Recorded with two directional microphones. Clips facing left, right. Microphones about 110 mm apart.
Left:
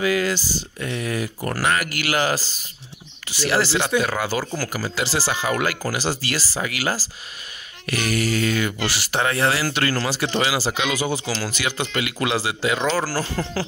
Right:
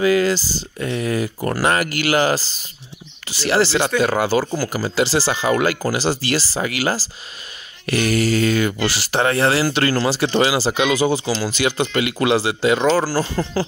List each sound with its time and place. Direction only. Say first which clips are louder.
0.0 s speech: right 5 dB; 35° right (ahead or behind)
11.2 s speech: right 5 dB; 15° right (ahead or behind)
11.5 s speech: right 6 dB; 30° right (ahead or behind)
13.0 s speech: right 4 dB; 20° right (ahead or behind)